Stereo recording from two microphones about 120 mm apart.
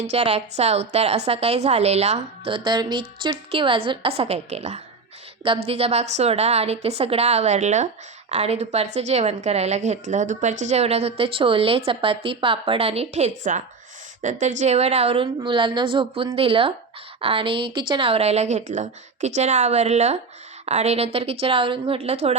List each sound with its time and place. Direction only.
0.0 s a woman's voice: 60° right (ahead or behind)
2.5 s a woman's voice: 40° right (ahead or behind); by 7.9 s 75° right (ahead or behind)
8.3 s a woman's voice: 65° right (ahead or behind)